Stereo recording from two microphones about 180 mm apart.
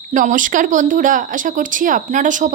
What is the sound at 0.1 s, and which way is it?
A woman's voice, 45° right (ahead or behind).